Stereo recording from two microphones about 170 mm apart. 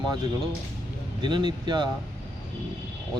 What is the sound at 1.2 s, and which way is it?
Speech, 25° right (ahead or behind).